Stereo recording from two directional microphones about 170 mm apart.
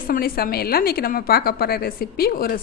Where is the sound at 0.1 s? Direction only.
60° left (ahead or behind).